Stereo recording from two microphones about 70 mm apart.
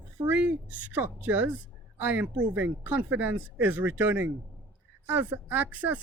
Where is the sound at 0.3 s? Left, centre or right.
Right.